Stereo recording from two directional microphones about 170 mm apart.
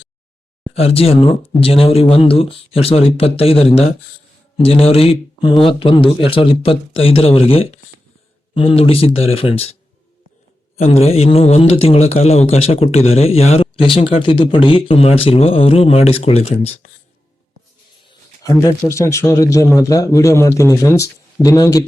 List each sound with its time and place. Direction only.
0.7 s speech: 35° left (ahead or behind)
10.8 s speech: 40° left (ahead or behind)
18.4 s speech: 20° left (ahead or behind)